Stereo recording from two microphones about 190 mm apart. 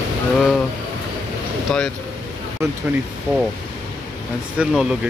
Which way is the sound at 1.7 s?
5° left (ahead or behind).